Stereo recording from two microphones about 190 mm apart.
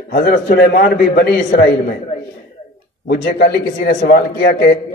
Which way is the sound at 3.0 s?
55° left (ahead or behind).